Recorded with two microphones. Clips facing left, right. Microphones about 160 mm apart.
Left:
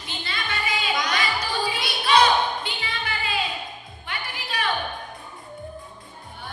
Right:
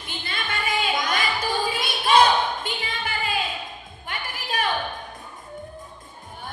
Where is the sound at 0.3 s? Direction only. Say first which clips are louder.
Right 1 dB; 50° right (ahead or behind).